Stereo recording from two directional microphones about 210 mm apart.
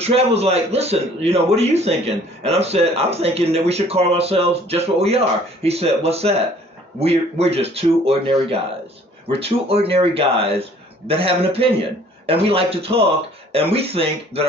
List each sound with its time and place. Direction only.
0.0 s a man's voice: 30° right (ahead or behind)